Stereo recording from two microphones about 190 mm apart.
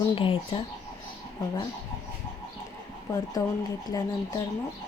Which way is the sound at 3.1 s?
20° left (ahead or behind).